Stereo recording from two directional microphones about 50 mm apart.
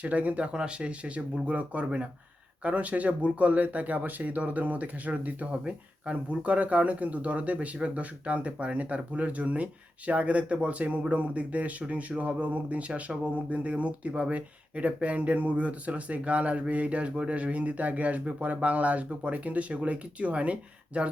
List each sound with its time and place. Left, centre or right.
0.0 s speech: right